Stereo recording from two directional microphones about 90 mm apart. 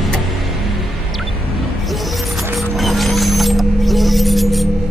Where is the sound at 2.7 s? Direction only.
Centre (ahead or behind).